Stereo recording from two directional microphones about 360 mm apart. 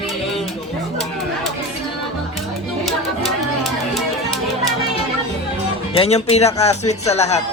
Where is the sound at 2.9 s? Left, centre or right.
Centre.